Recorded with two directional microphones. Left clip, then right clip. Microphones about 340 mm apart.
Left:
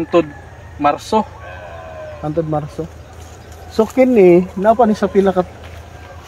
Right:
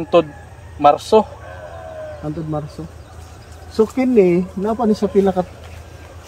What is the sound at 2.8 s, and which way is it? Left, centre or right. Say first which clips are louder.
Speech: left 8 dB; left.